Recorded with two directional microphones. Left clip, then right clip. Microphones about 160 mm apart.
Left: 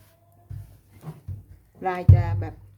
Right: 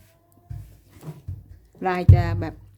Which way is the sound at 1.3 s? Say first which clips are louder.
Right 1 dB; centre (ahead or behind).